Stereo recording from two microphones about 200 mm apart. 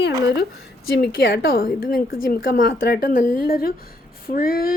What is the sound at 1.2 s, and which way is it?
A woman's voice, 60° left (ahead or behind).